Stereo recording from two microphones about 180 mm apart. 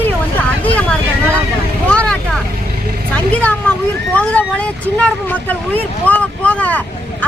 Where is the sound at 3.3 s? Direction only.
5° left (ahead or behind).